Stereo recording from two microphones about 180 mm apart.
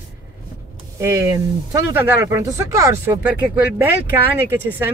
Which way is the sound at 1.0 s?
15° right (ahead or behind).